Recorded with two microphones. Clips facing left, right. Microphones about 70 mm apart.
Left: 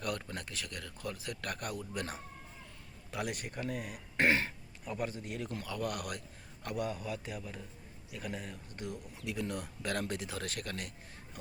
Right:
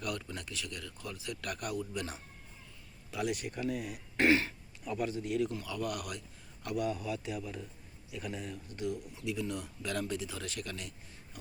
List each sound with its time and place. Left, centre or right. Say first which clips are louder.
0.0 s speech: left 1 dB; left